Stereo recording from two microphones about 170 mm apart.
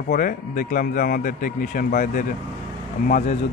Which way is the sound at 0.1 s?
55° left (ahead or behind).